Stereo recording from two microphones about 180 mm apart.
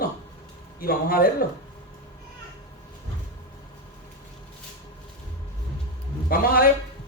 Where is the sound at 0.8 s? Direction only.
55° left (ahead or behind).